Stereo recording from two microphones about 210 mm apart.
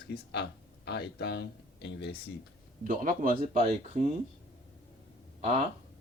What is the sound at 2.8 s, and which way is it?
Speech, 40° right (ahead or behind).